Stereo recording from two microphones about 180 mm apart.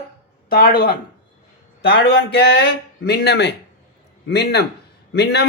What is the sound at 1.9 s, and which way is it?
Speech, 65° left (ahead or behind).